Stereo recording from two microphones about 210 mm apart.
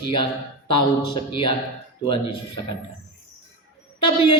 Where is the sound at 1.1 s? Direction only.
20° left (ahead or behind).